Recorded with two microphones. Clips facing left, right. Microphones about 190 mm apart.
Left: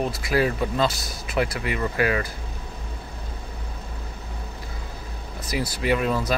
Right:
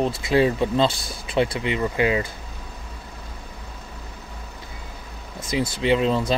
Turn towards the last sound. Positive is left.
turn(degrees=-25)  # may be behind; listen again after turning